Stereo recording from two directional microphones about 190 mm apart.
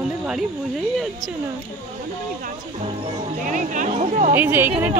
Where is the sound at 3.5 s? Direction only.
40° right (ahead or behind).